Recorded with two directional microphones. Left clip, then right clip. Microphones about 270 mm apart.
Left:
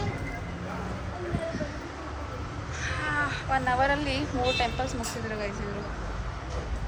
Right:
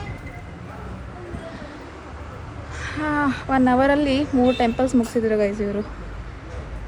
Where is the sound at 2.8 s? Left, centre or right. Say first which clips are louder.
Right 6 dB; right.